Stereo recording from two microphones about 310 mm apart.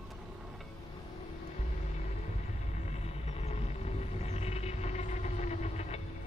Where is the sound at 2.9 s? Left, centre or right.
Left.